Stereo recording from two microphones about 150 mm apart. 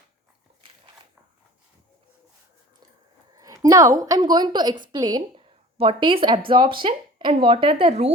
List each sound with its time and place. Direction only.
3.3 s a woman's voice: 25° right (ahead or behind); by 8.1 s 45° right (ahead or behind)